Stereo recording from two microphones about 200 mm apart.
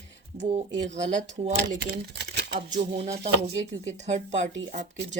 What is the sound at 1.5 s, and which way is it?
Speech, 55° right (ahead or behind).